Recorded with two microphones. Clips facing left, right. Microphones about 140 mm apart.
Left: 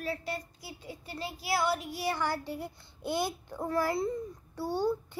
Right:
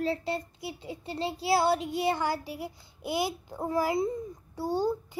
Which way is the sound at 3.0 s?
10° right (ahead or behind).